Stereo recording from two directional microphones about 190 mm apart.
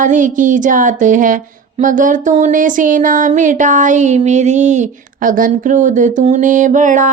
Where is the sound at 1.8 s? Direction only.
45° right (ahead or behind).